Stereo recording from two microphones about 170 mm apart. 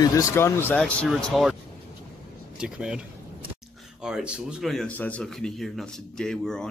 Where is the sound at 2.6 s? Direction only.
5° right (ahead or behind).